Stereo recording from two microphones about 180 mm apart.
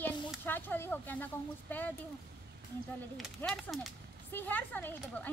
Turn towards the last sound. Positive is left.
turn(degrees=10)  # may be behind; listen again after turning